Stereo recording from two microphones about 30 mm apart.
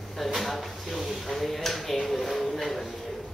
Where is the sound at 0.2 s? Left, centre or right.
Centre.